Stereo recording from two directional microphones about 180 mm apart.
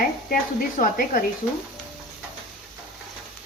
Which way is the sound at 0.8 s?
55° left (ahead or behind).